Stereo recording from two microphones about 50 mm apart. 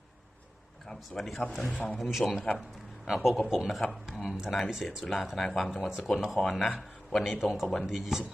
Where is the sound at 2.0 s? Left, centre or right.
Centre.